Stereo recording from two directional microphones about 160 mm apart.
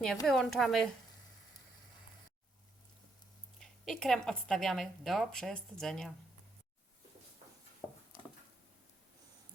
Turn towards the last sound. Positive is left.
turn(degrees=30)  # may be behind; listen again after turning